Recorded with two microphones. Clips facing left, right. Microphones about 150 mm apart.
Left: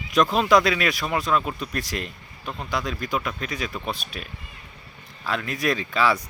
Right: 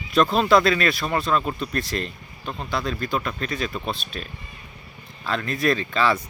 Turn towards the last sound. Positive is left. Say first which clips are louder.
# right 1 dB
turn(degrees=10)  # may be behind; listen again after turning